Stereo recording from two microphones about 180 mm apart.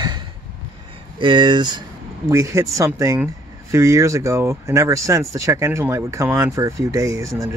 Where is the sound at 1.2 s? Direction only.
25° right (ahead or behind).